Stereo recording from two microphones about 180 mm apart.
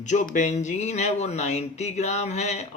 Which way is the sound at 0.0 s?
45° left (ahead or behind).